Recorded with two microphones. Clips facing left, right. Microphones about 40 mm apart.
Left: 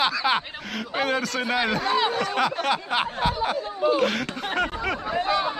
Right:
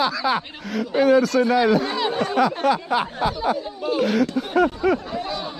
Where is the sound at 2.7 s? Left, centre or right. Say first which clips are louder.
Right 3 dB; left.